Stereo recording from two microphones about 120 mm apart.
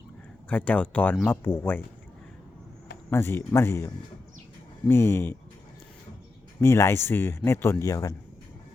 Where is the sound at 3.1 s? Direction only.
20° left (ahead or behind).